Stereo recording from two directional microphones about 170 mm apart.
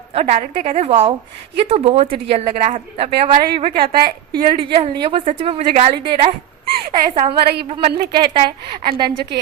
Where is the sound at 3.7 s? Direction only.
60° right (ahead or behind).